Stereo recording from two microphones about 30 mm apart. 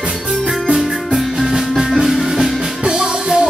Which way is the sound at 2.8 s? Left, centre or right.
Right.